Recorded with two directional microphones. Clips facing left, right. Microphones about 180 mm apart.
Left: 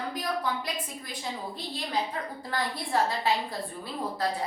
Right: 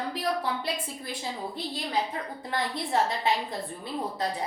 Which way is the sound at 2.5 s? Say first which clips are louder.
Right 1 dB; 20° right (ahead or behind).